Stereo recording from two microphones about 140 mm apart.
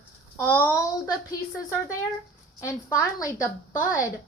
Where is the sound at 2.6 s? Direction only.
20° left (ahead or behind).